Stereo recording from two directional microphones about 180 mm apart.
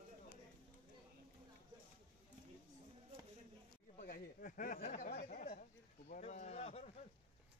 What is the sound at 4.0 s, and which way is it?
Speech, 50° left (ahead or behind).